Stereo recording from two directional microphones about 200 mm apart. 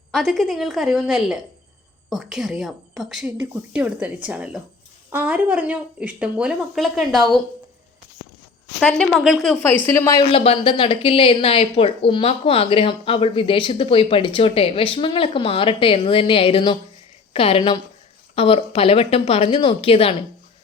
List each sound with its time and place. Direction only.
0.1 s a woman's voice: centre (ahead or behind)
8.8 s a woman's voice: 5° left (ahead or behind)
10.2 s speech: 30° left (ahead or behind)